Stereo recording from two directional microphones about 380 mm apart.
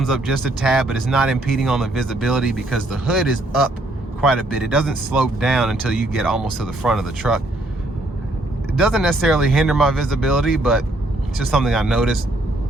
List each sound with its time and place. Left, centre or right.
0.0 s speech: centre
8.8 s speech: centre